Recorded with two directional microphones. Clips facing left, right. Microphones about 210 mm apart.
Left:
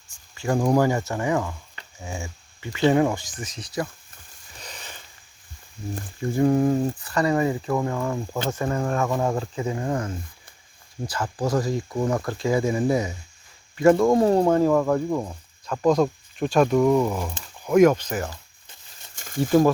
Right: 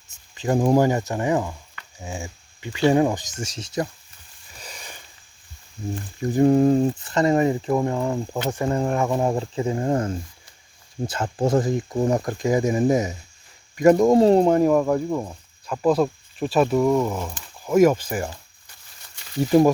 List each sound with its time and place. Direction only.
0.1 s speech: 20° right (ahead or behind)
2.0 s dog: 15° right (ahead or behind)
2.9 s speech: 20° right (ahead or behind)
4.6 s a sound: 10° right (ahead or behind)
6.3 s speech: 25° right (ahead or behind); by 18.3 s 10° right (ahead or behind)
19.1 s a sound: 45° left (ahead or behind)
19.4 s speech: 15° right (ahead or behind)